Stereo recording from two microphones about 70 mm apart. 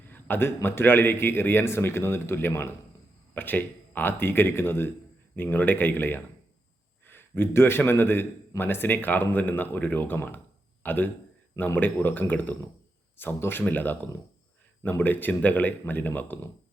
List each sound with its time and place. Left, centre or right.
0.1 s a man's voice: left